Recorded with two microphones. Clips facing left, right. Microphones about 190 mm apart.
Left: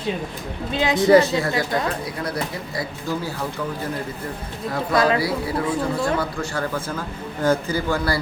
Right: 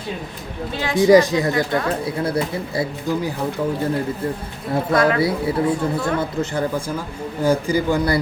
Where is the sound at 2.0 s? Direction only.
25° right (ahead or behind).